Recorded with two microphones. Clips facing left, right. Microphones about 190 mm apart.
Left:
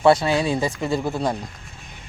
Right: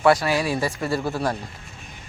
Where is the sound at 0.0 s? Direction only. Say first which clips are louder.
Left 2 dB; 25° left (ahead or behind).